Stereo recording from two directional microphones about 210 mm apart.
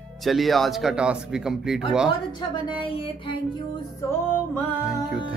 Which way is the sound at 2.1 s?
25° left (ahead or behind).